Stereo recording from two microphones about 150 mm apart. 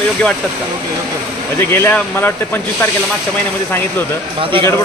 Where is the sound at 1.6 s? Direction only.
15° left (ahead or behind).